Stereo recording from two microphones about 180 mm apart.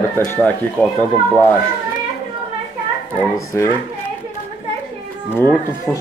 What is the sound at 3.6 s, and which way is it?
Speech, 15° left (ahead or behind).